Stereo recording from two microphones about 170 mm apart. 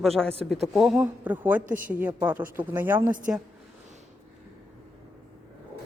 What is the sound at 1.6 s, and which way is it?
Speech, 50° right (ahead or behind).